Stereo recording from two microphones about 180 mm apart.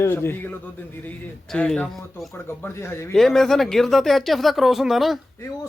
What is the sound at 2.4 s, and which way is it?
Speech, 15° left (ahead or behind).